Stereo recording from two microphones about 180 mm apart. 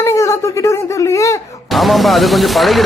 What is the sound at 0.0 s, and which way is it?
Speech, 15° left (ahead or behind).